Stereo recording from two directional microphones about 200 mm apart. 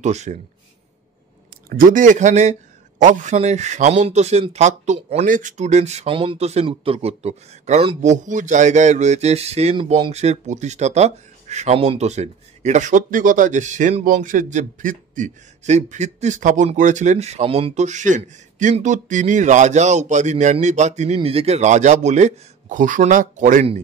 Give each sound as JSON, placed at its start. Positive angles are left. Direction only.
{"t": 0.0, "sound": "a man's voice", "side_deg": -35}
{"t": 1.7, "sound": "a man's voice", "side_deg": -45}